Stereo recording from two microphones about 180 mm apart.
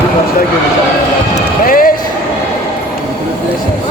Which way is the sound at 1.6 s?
50° left (ahead or behind).